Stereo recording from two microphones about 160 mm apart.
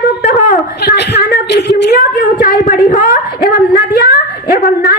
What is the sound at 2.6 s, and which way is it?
A woman's voice, 55° left (ahead or behind).